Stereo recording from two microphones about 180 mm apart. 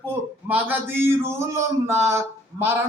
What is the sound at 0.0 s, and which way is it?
A man's voice, 10° right (ahead or behind).